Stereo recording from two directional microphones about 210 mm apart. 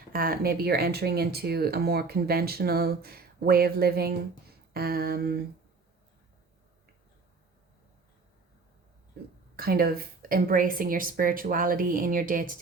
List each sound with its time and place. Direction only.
0.1 s speech: 45° right (ahead or behind)
9.6 s a woman's voice: 45° right (ahead or behind)